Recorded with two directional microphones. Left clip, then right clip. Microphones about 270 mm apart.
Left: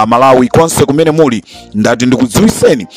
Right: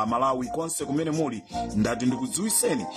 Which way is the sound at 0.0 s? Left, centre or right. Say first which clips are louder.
Left 19 dB; left.